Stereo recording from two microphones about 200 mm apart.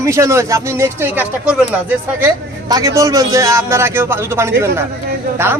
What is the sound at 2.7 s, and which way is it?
Speech, 15° right (ahead or behind).